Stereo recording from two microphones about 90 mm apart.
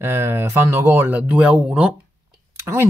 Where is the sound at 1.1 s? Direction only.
15° right (ahead or behind).